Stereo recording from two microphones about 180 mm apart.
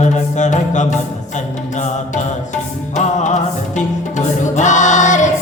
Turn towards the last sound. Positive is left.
turn(degrees=40)  # may be behind; listen again after turning